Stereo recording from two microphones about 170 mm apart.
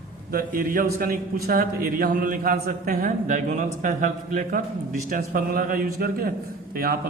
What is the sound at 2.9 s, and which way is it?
A man's voice, 50° right (ahead or behind).